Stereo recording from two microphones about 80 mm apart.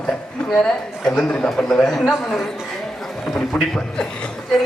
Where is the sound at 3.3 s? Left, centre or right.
Centre.